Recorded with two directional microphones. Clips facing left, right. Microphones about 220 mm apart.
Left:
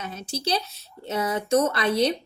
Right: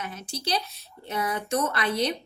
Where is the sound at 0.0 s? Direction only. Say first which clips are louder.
Left 4 dB; 25° left (ahead or behind).